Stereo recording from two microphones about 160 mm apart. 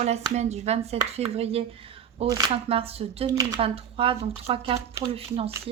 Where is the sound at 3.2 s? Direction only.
25° right (ahead or behind).